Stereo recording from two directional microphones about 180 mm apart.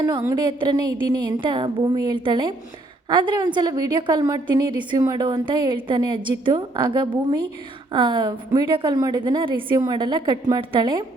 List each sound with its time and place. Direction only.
0.0 s a woman's voice: 15° right (ahead or behind)